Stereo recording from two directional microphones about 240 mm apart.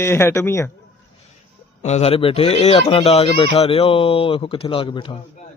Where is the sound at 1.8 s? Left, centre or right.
Left.